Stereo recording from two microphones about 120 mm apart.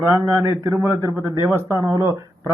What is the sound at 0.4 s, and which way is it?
A man's voice, 25° right (ahead or behind).